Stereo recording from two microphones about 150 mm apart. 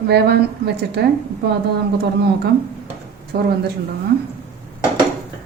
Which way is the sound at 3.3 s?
90° right.